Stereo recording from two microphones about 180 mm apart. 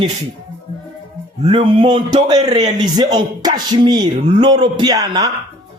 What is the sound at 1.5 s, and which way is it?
Speech, 25° right (ahead or behind).